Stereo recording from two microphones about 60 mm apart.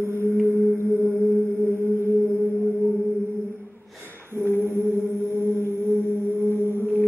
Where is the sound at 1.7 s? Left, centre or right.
Right.